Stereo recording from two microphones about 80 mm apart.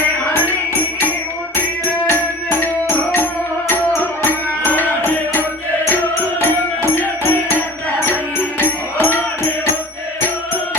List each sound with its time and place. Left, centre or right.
0.3 s music: left
6.9 s music: left